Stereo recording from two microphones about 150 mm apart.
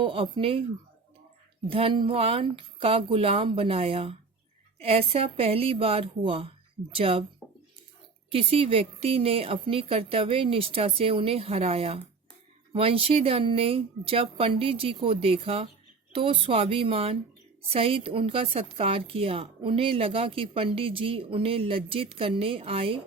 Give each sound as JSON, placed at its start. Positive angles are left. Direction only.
{"t": 0.0, "sound": "a woman's voice", "side_deg": -35}
{"t": 1.6, "sound": "a woman's voice", "side_deg": -35}
{"t": 8.3, "sound": "a woman's voice", "side_deg": -40}